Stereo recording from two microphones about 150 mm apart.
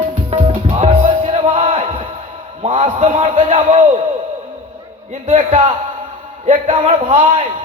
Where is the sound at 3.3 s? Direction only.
35° right (ahead or behind).